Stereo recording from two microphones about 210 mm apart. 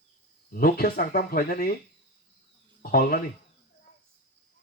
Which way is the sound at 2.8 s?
45° left (ahead or behind).